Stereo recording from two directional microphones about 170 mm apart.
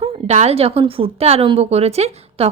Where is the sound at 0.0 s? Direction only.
40° right (ahead or behind).